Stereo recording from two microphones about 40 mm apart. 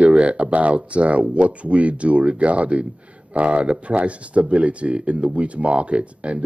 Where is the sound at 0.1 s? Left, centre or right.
Right.